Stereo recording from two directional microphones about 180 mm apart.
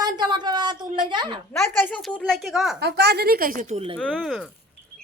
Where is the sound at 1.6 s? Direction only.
10° left (ahead or behind).